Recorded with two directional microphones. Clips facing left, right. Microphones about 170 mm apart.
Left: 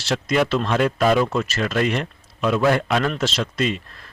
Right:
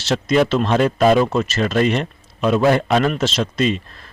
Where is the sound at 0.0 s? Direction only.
25° right (ahead or behind).